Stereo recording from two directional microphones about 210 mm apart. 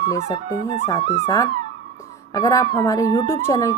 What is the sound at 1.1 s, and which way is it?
Speech, 15° left (ahead or behind).